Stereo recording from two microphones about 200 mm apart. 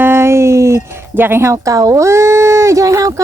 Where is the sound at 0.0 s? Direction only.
10° right (ahead or behind).